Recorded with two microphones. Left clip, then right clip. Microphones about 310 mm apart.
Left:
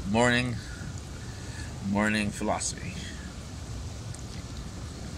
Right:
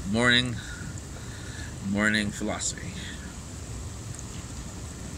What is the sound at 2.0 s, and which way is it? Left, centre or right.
Speech, centre.